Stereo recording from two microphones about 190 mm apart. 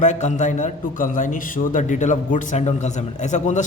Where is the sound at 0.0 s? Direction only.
40° left (ahead or behind).